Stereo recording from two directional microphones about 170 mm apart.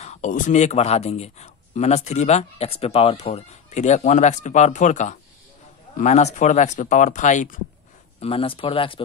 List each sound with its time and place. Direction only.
0.0 s speech: 45° left (ahead or behind)
8.2 s speech: 35° left (ahead or behind)